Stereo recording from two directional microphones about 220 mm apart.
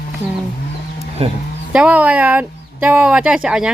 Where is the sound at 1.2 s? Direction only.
25° right (ahead or behind).